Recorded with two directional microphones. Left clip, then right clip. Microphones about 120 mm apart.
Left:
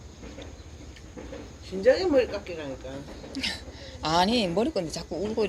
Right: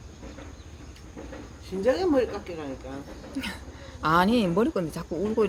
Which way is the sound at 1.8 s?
35° right (ahead or behind).